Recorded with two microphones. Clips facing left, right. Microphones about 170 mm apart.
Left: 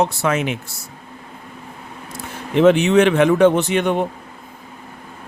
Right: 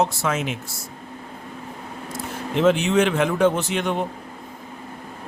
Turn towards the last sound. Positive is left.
turn(degrees=60)  # may be behind; listen again after turning